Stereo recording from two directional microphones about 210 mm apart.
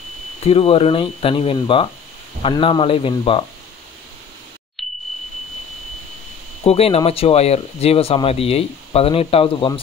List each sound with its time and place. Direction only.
0.4 s speech: 30° left (ahead or behind)
4.8 s a sound: centre (ahead or behind)
6.6 s speech: 30° left (ahead or behind)